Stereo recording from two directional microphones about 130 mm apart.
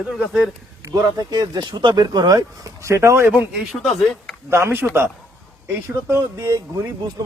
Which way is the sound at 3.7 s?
Centre (ahead or behind).